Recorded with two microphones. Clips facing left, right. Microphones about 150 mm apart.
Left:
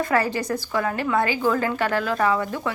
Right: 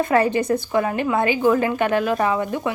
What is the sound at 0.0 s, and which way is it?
A woman's voice, 20° right (ahead or behind).